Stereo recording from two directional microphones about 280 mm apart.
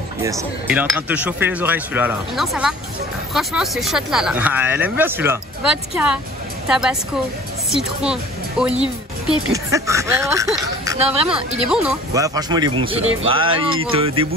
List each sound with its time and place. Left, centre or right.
0.2 s speech: centre
12.1 s speech: centre